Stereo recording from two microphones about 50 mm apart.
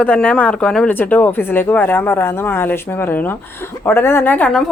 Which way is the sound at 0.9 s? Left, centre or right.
Left.